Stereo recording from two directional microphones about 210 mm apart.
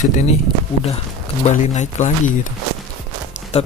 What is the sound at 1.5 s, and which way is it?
Speech, 35° left (ahead or behind).